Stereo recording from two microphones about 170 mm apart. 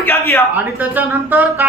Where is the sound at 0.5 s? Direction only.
10° right (ahead or behind).